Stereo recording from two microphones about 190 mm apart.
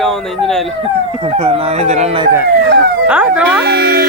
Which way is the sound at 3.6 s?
55° right (ahead or behind).